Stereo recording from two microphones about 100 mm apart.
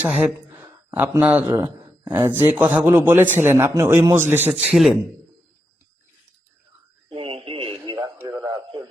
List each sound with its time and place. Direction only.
0.0 s a man's voice: 20° right (ahead or behind)
4.7 s a man's voice: centre (ahead or behind)
7.2 s radio: 65° right (ahead or behind)
8.4 s radio: 45° right (ahead or behind)